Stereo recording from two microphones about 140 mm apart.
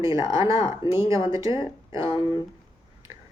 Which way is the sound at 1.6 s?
35° left (ahead or behind).